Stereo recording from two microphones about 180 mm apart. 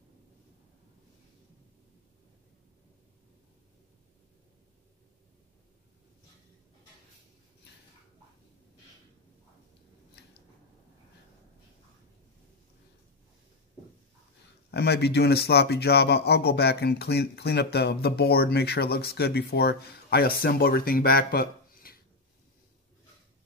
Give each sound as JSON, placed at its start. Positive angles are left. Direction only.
{"t": 14.7, "sound": "a man's voice", "side_deg": 65}